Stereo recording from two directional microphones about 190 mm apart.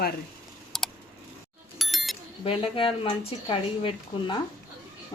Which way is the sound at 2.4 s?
30° left (ahead or behind).